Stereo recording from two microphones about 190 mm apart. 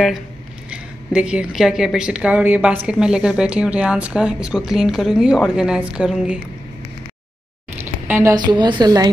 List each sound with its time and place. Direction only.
0.7 s a woman's voice: 5° right (ahead or behind)
7.8 s a woman's voice: 10° right (ahead or behind)